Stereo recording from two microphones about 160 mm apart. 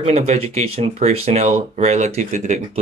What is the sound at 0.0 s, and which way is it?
Speech, 40° right (ahead or behind).